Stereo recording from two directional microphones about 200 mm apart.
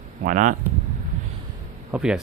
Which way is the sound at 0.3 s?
40° right (ahead or behind).